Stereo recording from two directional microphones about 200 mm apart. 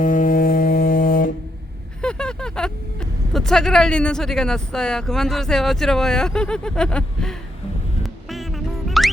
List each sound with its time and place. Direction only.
0.0 s music: 40° left (ahead or behind)
2.0 s a sound: 5° left (ahead or behind)
3.3 s speech: centre (ahead or behind)
8.0 s music: centre (ahead or behind)